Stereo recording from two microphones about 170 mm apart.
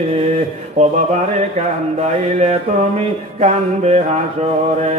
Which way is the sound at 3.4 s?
40° right (ahead or behind).